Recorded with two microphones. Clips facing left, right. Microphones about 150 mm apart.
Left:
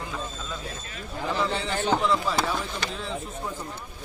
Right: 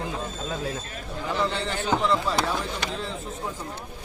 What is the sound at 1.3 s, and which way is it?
Speech, centre (ahead or behind).